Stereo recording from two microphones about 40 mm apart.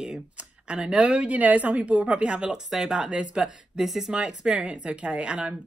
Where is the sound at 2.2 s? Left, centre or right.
Right.